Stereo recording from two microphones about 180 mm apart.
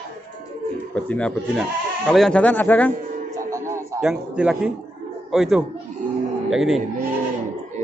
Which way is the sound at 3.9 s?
5° right (ahead or behind).